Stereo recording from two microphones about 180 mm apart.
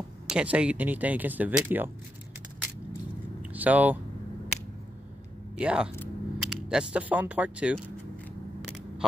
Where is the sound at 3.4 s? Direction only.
10° right (ahead or behind).